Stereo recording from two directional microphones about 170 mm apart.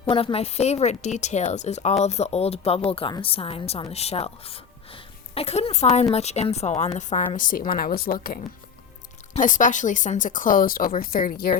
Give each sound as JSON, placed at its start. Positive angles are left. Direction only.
{"t": 0.0, "sound": "a woman's voice", "side_deg": 30}